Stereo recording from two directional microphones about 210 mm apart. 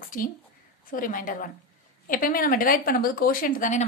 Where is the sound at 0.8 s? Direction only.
40° left (ahead or behind).